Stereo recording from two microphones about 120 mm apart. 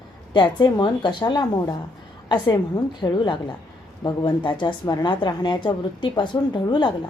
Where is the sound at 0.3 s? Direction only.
40° left (ahead or behind).